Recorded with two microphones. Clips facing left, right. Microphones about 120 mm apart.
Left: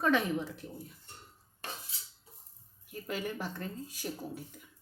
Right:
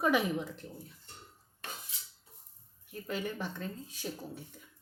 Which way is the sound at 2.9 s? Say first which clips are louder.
Even; 5° left (ahead or behind).